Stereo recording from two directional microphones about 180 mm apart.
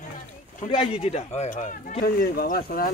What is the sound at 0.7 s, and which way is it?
Speech, 30° left (ahead or behind).